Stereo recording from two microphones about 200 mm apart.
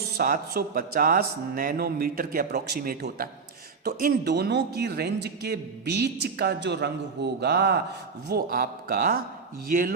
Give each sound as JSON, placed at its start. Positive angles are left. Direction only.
{"t": 0.2, "sound": "a man's voice", "side_deg": -50}